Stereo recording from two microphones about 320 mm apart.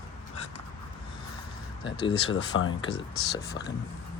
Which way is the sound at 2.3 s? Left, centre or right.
Left.